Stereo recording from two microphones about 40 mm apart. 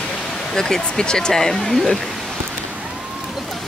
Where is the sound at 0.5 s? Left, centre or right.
Centre.